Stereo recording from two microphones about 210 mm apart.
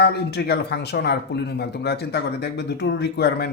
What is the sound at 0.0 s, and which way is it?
Speech, 50° left (ahead or behind).